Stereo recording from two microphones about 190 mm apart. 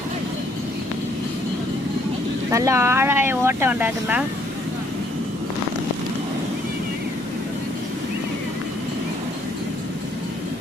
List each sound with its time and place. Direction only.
2.5 s speech: 15° right (ahead or behind)